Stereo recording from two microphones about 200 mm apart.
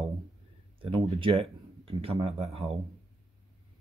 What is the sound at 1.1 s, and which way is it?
Speech, 30° right (ahead or behind).